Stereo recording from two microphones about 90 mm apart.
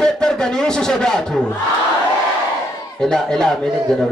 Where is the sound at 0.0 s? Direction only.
5° left (ahead or behind).